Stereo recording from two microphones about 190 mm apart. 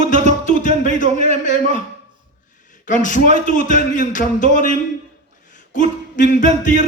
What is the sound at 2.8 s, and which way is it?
A man's voice, 45° left (ahead or behind).